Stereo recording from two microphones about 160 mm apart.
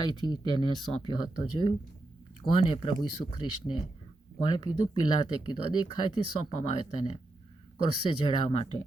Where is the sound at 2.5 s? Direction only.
35° left (ahead or behind).